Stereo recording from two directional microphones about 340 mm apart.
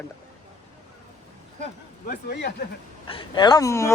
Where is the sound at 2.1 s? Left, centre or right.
Left.